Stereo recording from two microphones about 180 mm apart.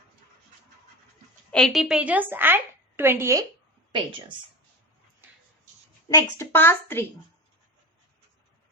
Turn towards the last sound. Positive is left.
turn(degrees=15)  # may be behind; listen again after turning